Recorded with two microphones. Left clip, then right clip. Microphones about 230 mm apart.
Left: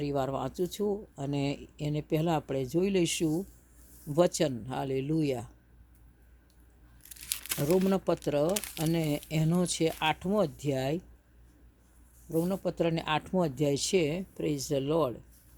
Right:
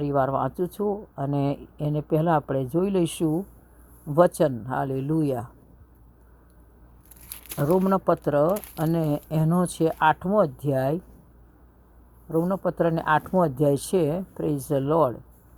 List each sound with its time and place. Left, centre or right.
0.0 s speech: centre
7.2 s crumpling: left
7.9 s speech: centre
12.3 s speech: centre